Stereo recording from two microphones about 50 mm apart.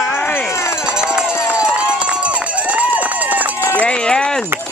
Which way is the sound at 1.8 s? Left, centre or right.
Right.